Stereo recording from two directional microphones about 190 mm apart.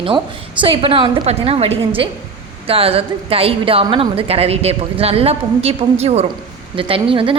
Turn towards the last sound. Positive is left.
turn(degrees=-30)  # may be behind; listen again after turning